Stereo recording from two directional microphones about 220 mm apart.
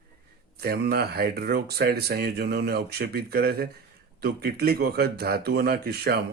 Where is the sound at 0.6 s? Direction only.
45° right (ahead or behind).